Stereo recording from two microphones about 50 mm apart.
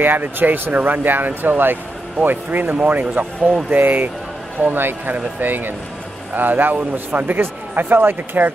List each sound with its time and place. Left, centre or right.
0.0 s speech: right